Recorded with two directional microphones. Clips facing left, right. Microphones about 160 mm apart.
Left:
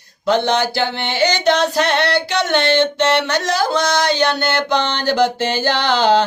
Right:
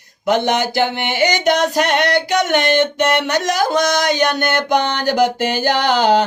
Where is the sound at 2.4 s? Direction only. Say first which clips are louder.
Left 1 dB; 15° right (ahead or behind).